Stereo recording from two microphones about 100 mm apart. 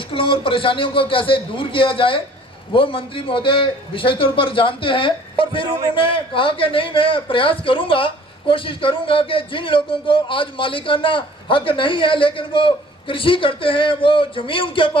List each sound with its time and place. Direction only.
0.1 s a man's voice: 60° left (ahead or behind)
5.6 s a man's voice: 40° right (ahead or behind)
5.9 s a man's voice: 60° left (ahead or behind)